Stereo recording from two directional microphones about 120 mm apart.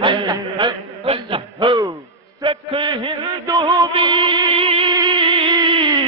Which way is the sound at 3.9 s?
45° right (ahead or behind).